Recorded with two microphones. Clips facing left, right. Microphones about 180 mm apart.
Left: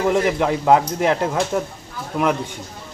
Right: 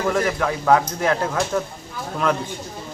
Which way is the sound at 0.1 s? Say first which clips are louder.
Left 3 dB; 20° left (ahead or behind).